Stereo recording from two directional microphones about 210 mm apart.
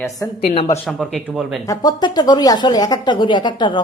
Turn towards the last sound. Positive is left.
turn(degrees=20)  # may be behind; listen again after turning